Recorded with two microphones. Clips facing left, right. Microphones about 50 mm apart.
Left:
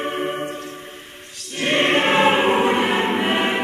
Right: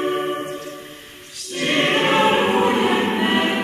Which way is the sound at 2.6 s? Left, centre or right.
Left.